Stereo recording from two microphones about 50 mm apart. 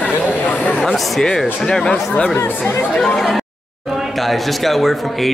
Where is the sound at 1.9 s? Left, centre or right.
Left.